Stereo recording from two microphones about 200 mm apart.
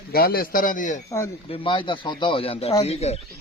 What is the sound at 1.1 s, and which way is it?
Speech, 15° left (ahead or behind).